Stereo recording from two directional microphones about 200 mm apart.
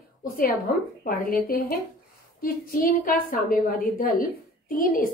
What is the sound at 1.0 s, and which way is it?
A woman's voice, 45° left (ahead or behind).